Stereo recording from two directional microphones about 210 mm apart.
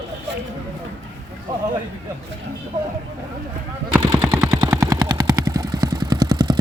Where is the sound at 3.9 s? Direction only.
15° right (ahead or behind).